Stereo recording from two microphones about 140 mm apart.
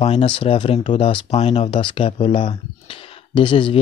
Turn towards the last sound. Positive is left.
turn(degrees=40)  # may be behind; listen again after turning